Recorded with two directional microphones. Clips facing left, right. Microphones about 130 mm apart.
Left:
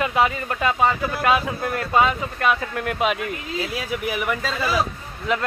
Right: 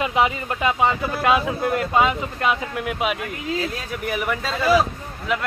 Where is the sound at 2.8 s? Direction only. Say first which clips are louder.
Left 3 dB; 5° right (ahead or behind).